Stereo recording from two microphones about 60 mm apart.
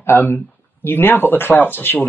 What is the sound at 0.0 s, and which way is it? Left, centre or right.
Speech, left.